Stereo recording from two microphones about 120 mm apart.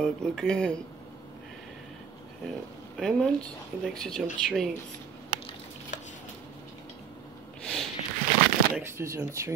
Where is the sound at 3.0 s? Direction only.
5° left (ahead or behind).